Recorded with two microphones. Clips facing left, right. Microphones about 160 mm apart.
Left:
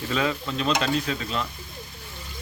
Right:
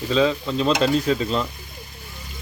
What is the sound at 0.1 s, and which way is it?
Speech, 25° right (ahead or behind).